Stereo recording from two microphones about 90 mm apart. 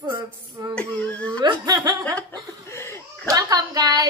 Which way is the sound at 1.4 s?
55° right (ahead or behind).